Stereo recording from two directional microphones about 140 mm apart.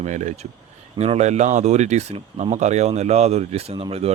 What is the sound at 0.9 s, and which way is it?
Speech, 50° right (ahead or behind).